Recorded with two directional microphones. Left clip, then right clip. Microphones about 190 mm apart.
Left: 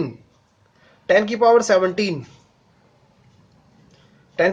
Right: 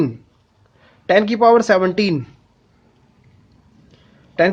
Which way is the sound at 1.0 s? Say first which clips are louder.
Right 2 dB; 45° right (ahead or behind).